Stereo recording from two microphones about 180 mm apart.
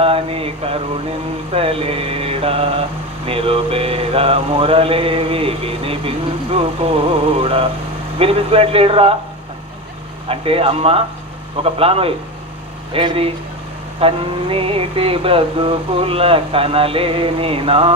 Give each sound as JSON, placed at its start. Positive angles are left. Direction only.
{"t": 0.0, "sound": "mantra", "side_deg": -30}
{"t": 10.2, "sound": "mantra", "side_deg": -30}
{"t": 12.9, "sound": "speech", "side_deg": -30}
{"t": 14.0, "sound": "mantra", "side_deg": -35}